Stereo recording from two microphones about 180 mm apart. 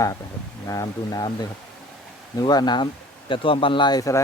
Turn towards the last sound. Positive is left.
turn(degrees=20)  # may be behind; listen again after turning